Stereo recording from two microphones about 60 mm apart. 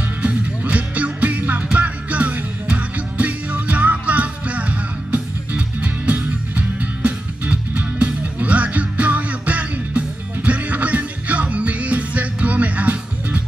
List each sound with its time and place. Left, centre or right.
0.2 s music: right